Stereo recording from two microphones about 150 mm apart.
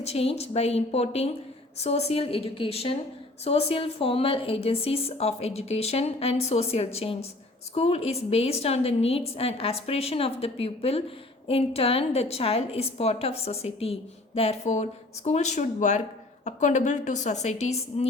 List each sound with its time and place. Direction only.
0.0 s a woman's voice: 45° left (ahead or behind)